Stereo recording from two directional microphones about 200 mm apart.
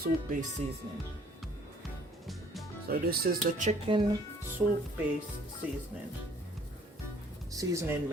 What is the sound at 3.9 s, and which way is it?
Speech, 25° right (ahead or behind).